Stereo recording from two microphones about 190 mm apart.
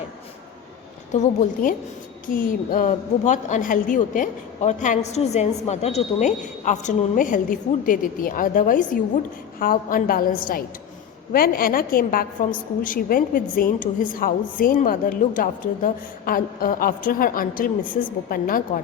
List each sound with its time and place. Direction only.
1.1 s a woman's voice: 40° left (ahead or behind)